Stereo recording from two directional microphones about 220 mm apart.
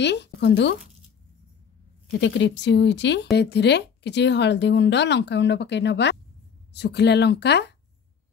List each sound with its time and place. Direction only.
0.0 s speech: 50° left (ahead or behind)
2.1 s speech: 55° left (ahead or behind)